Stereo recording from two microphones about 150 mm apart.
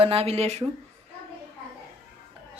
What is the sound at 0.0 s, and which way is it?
Speech, 40° right (ahead or behind).